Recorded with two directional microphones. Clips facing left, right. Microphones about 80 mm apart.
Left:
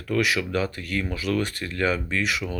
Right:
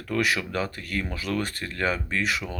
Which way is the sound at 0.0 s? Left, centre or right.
Right.